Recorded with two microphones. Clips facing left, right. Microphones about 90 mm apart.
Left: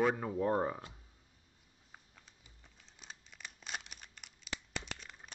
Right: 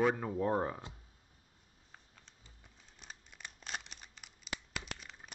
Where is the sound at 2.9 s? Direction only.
Centre (ahead or behind).